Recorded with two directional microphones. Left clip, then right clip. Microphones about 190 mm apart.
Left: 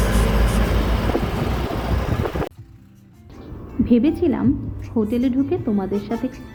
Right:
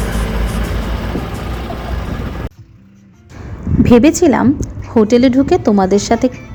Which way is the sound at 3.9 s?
45° right (ahead or behind).